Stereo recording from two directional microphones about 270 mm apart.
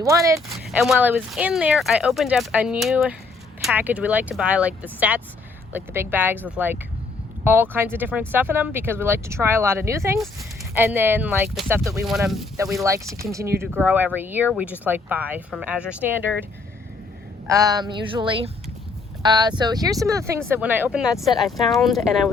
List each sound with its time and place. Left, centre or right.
0.0 s speech: centre
7.4 s speech: centre
13.1 s speech: centre
17.4 s speech: centre